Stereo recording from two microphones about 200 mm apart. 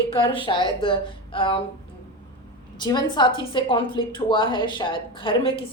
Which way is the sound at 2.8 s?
20° left (ahead or behind).